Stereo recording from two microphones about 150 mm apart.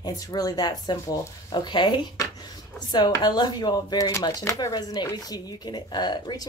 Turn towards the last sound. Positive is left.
turn(degrees=30)  # may be behind; listen again after turning